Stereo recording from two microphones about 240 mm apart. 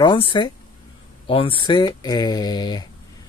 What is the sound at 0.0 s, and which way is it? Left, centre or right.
Speech, centre.